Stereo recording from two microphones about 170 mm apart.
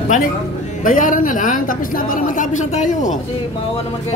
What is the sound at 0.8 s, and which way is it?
A woman's voice, 50° left (ahead or behind).